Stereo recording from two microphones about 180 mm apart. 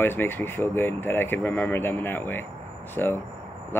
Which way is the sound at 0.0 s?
10° left (ahead or behind).